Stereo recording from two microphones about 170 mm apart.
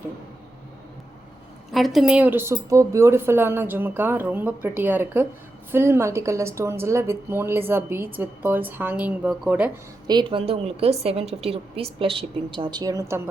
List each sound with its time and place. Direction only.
1.7 s speech: centre (ahead or behind)
10.1 s a woman's voice: 25° right (ahead or behind)